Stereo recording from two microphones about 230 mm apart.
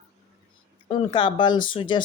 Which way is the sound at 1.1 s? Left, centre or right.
Centre.